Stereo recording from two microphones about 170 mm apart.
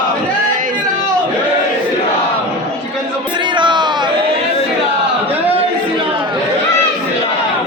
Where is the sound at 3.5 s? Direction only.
25° right (ahead or behind).